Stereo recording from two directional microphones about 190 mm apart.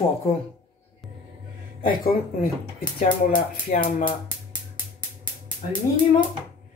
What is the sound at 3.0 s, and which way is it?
Speech, 45° left (ahead or behind).